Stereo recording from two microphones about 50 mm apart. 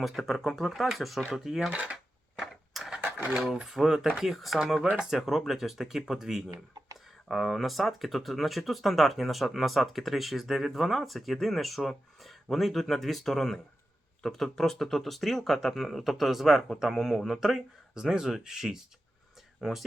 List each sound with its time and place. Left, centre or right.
0.0 s speech: centre
1.7 s speech: right
2.4 s vehicle: centre
3.3 s speech: centre
4.6 s speech: centre